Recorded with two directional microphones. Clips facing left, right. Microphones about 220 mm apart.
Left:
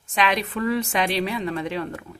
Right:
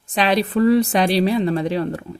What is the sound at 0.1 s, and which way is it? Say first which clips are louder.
A woman's voice: right 5 dB; 35° right (ahead or behind).